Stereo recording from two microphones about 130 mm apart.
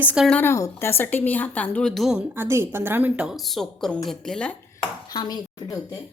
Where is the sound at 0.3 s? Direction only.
15° left (ahead or behind); by 2.2 s centre (ahead or behind).